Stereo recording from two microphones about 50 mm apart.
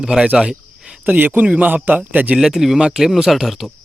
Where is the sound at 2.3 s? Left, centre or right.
Centre.